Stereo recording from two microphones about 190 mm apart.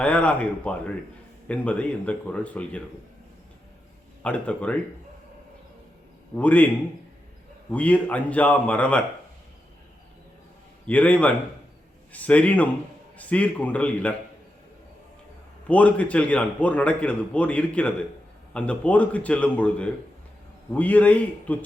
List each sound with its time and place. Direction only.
0.0 s a man's voice: 5° left (ahead or behind)
4.2 s a man's voice: 5° left (ahead or behind)
6.3 s a man's voice: 10° left (ahead or behind)
7.7 s a man's voice: 10° left (ahead or behind)
10.8 s a man's voice: 10° left (ahead or behind)
15.6 s a man's voice: 5° left (ahead or behind)